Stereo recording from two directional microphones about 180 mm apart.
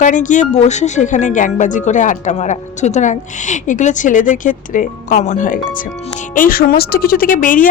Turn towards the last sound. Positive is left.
turn(degrees=50)  # may be behind; listen again after turning